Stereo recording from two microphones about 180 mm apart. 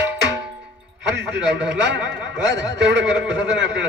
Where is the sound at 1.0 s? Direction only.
75° right (ahead or behind).